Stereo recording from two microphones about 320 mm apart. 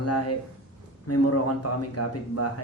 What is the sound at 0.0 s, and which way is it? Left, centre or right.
A man's voice, left.